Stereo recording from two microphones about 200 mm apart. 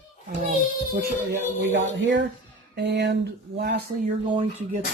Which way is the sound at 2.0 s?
65° right (ahead or behind).